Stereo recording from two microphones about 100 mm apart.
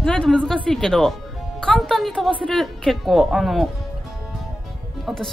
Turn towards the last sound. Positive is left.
turn(degrees=5)  # may be behind; listen again after turning